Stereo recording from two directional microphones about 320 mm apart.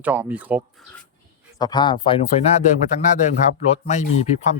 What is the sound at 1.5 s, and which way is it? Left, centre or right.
Speech, centre.